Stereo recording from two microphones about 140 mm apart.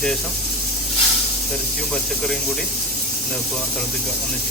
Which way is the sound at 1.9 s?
5° left (ahead or behind).